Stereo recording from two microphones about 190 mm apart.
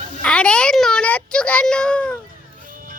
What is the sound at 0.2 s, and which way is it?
A child's voice, 5° left (ahead or behind).